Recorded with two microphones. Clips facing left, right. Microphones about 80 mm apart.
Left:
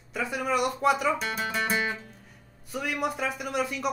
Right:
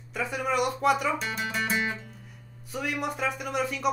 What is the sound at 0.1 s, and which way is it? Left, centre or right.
Speech, centre.